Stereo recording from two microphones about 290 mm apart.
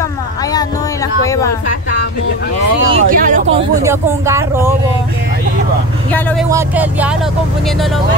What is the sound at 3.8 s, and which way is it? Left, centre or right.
Speech, centre.